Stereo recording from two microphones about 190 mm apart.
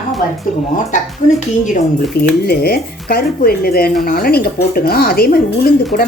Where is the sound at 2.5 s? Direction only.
55° left (ahead or behind).